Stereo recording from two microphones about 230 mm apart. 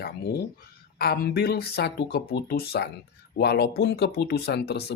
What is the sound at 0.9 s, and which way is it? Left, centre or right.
Speech, left.